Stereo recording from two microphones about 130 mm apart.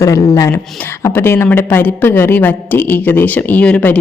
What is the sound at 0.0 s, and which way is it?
A man's voice, 25° left (ahead or behind).